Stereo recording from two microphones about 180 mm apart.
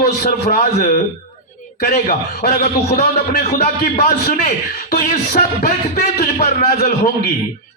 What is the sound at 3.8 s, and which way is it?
A man's voice, 50° left (ahead or behind).